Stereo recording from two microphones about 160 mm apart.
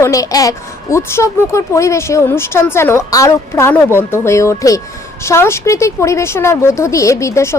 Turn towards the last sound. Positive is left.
turn(degrees=20)  # may be behind; listen again after turning